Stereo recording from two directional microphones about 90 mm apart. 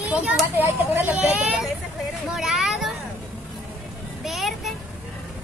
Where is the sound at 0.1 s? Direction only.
15° right (ahead or behind).